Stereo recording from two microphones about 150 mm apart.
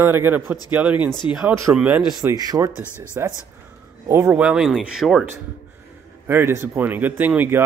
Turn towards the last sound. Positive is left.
turn(degrees=-15)  # may be behind; listen again after turning